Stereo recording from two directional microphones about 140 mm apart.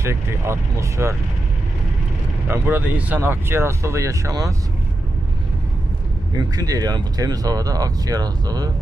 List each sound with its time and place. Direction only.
0.0 s speech: 20° right (ahead or behind)
2.5 s speech: 15° right (ahead or behind)
6.3 s speech: 25° right (ahead or behind)